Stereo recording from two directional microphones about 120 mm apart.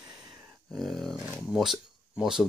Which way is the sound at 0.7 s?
Centre (ahead or behind).